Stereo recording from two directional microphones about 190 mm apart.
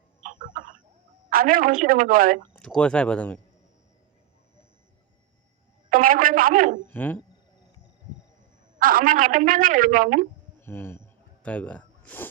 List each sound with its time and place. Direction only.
0.2 s a sound: 40° right (ahead or behind)
1.3 s a woman's voice: 50° right (ahead or behind)
2.5 s speech: 5° left (ahead or behind)
5.9 s a sound: 45° right (ahead or behind)
6.8 s speech: 10° left (ahead or behind)
8.8 s a woman's voice: 45° right (ahead or behind)
10.6 s snort: 10° left (ahead or behind)